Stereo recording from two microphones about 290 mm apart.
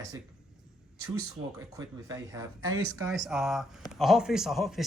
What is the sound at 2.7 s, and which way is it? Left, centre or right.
Speech, right.